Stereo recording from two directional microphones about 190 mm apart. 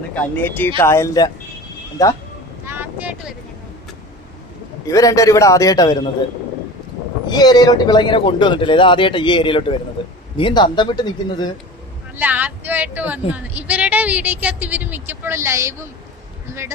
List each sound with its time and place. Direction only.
0.1 s a man's voice: 10° left (ahead or behind)
2.6 s vehicle: 10° right (ahead or behind)
4.9 s a man's voice: 15° left (ahead or behind)
7.3 s speech: 20° left (ahead or behind)
12.1 s a woman's voice: 10° right (ahead or behind)